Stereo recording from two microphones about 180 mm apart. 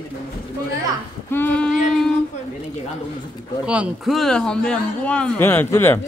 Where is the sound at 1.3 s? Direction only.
10° left (ahead or behind).